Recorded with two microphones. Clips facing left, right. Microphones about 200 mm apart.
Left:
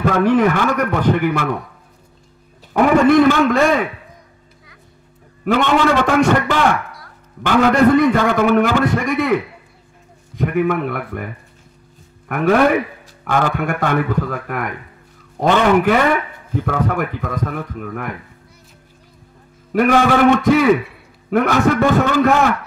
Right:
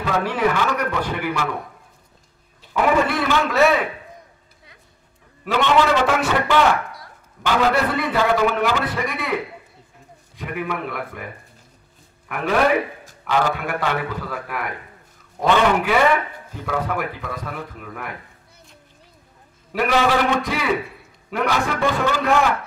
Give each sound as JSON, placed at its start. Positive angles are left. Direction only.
{"t": 0.0, "sound": "a man's voice", "side_deg": 50}
{"t": 2.7, "sound": "a man's voice", "side_deg": 50}
{"t": 5.4, "sound": "a man's voice", "side_deg": 50}
{"t": 12.3, "sound": "a man's voice", "side_deg": 50}
{"t": 19.7, "sound": "a man's voice", "side_deg": 50}